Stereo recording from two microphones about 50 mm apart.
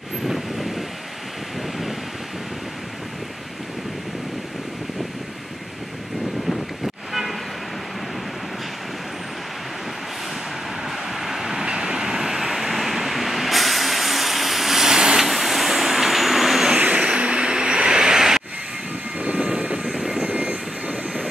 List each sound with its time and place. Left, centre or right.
0.3 s vehicle: centre
11.1 s train: centre
11.6 s vehicle: centre
16.7 s vehicle: right
19.1 s vehicle: right
20.2 s vehicle: right